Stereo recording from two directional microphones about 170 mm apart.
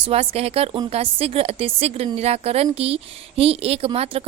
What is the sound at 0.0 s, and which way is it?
Speech, 35° right (ahead or behind).